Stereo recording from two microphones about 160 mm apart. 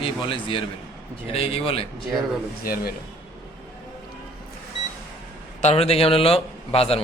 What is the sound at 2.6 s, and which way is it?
Speech, 70° left (ahead or behind).